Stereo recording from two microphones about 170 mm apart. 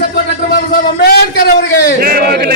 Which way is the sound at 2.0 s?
60° right (ahead or behind).